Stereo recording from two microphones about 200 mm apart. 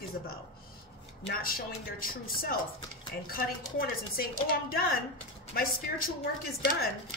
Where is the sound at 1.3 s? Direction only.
45° left (ahead or behind).